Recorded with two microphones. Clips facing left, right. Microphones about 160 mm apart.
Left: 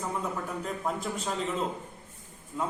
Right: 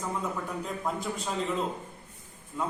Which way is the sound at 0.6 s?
Centre (ahead or behind).